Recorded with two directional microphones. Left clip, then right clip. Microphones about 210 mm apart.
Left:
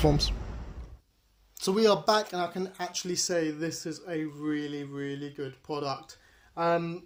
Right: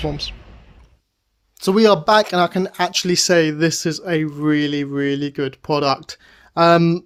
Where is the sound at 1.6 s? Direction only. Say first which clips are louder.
Right 10 dB; 40° right (ahead or behind).